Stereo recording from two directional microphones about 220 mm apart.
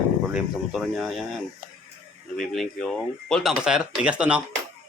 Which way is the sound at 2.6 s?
5° left (ahead or behind).